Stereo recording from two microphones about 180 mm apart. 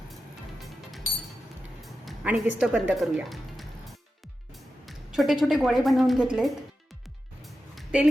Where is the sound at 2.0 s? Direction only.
5° right (ahead or behind).